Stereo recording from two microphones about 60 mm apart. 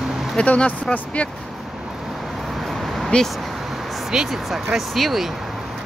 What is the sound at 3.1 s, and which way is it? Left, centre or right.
Speech, centre.